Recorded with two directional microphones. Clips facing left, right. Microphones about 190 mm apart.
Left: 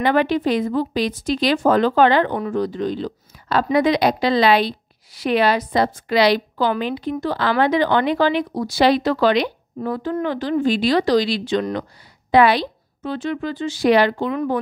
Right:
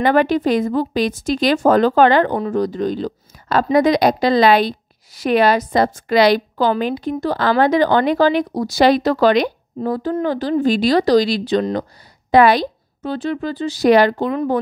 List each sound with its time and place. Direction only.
0.0 s a woman's voice: 45° right (ahead or behind)